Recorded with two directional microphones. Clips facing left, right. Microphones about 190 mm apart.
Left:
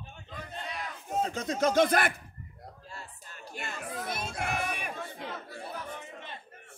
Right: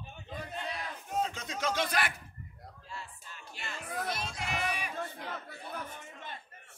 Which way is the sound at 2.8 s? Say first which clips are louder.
Right 4 dB; 40° left (ahead or behind).